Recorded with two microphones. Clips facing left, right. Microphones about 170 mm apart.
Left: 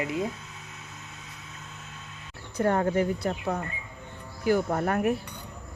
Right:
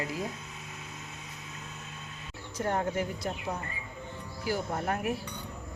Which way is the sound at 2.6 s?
65° left (ahead or behind).